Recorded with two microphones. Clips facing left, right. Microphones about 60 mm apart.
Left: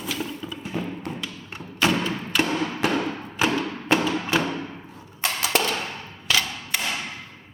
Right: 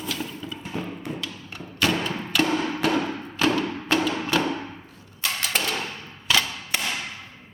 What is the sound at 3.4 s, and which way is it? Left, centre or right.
Music, centre.